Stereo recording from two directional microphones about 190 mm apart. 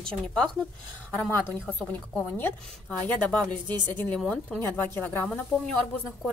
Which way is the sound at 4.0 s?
5° left (ahead or behind).